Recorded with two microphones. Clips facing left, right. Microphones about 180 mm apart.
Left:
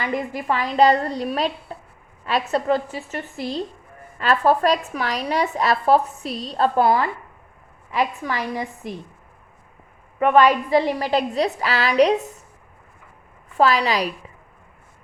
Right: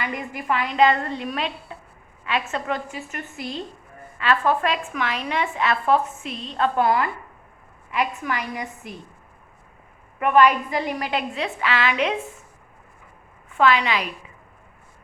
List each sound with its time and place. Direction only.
0.0 s speech: 35° left (ahead or behind)
10.2 s speech: 35° left (ahead or behind)
13.6 s speech: 35° left (ahead or behind)